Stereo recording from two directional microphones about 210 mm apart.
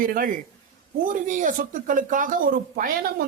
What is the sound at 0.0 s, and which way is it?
Speech, 40° right (ahead or behind).